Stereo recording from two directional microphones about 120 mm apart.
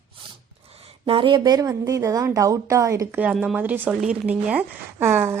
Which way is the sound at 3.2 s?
5° right (ahead or behind).